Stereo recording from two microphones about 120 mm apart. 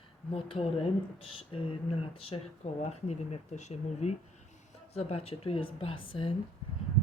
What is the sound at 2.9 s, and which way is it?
Speech, 65° left (ahead or behind).